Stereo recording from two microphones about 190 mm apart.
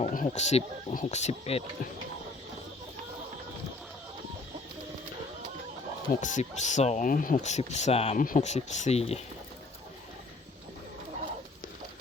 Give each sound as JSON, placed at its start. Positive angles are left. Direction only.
{"t": 0.0, "sound": "speech", "side_deg": 40}
{"t": 6.1, "sound": "speech", "side_deg": 40}